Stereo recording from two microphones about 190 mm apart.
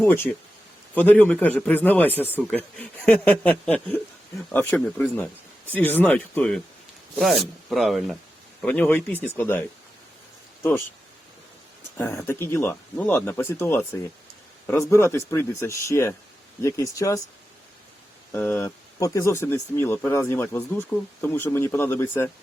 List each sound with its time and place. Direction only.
0.0 s speech: 10° left (ahead or behind)
11.9 s speech: 15° left (ahead or behind)
18.3 s speech: 10° left (ahead or behind)